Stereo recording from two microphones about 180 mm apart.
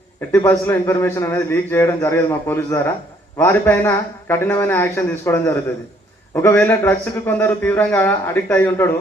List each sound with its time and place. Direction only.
0.3 s a man's voice: 10° left (ahead or behind)